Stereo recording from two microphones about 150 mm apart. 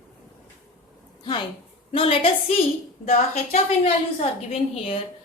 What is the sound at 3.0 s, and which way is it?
Speech, 50° left (ahead or behind).